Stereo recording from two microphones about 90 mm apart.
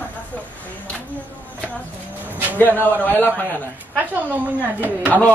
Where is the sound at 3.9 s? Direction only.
20° right (ahead or behind).